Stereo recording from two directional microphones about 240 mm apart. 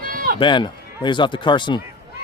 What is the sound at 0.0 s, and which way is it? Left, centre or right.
Run, right.